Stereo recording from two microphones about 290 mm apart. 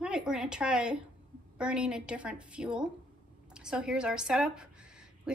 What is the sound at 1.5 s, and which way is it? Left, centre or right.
A woman's voice, centre.